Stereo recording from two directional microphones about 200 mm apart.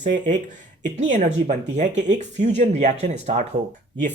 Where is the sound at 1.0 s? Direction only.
40° right (ahead or behind).